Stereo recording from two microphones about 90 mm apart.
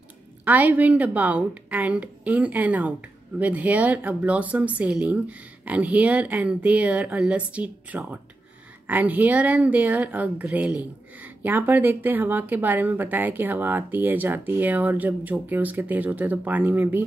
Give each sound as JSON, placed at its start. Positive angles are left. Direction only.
{"t": 0.5, "sound": "a woman's voice", "side_deg": -15}